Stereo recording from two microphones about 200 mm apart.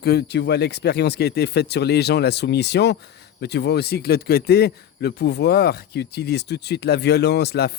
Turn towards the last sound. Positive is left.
turn(degrees=55)  # may be behind; listen again after turning